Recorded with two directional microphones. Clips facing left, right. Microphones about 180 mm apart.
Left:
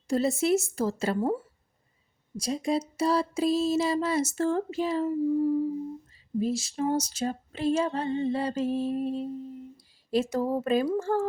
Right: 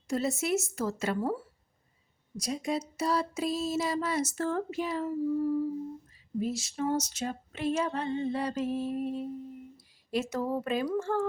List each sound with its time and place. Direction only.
0.1 s female singing: 30° left (ahead or behind)
2.3 s a sound: 30° left (ahead or behind)
5.0 s child singing: 15° left (ahead or behind)
6.4 s female singing: 30° left (ahead or behind)